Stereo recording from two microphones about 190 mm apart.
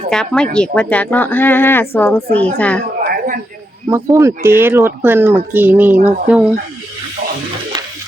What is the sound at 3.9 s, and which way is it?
Speech, 15° right (ahead or behind).